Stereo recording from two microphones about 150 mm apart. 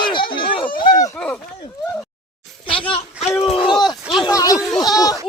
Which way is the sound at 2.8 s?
35° left (ahead or behind).